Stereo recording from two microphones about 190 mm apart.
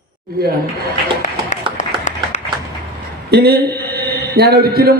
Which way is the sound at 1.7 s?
40° left (ahead or behind).